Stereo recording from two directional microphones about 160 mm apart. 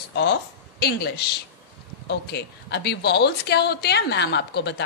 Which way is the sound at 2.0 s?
90° left.